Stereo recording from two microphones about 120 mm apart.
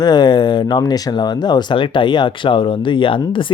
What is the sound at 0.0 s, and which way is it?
Speech, 35° left (ahead or behind).